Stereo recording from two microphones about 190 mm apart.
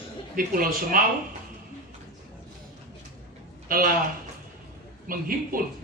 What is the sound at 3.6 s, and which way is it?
Speech, 50° right (ahead or behind).